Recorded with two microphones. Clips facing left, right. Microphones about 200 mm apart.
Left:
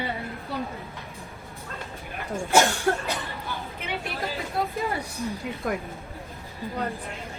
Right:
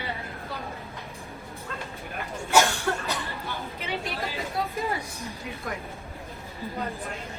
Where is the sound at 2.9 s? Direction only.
35° left (ahead or behind).